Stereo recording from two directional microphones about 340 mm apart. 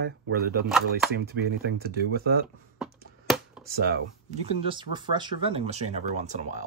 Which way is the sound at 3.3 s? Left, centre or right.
Centre.